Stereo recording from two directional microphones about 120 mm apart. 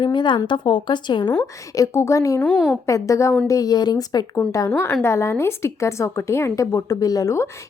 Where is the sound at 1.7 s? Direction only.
25° left (ahead or behind).